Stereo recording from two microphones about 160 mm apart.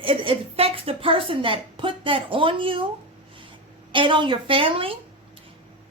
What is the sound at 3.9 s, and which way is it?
A woman's voice, 30° right (ahead or behind).